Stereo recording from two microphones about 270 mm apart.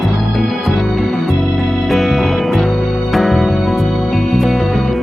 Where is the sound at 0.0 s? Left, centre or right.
Centre.